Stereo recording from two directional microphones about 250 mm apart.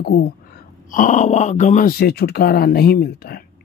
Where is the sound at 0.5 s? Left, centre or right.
Left.